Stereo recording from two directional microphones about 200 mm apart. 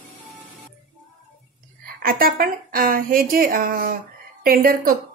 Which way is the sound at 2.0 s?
45° right (ahead or behind).